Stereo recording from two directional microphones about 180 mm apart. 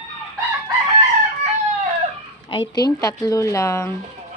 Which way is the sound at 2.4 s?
25° left (ahead or behind).